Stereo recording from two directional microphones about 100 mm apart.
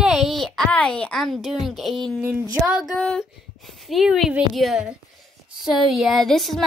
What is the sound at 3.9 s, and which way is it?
Speech, centre (ahead or behind).